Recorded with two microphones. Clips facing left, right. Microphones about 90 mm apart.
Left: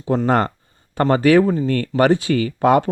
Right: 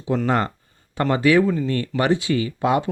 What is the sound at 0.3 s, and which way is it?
Speech, 45° left (ahead or behind).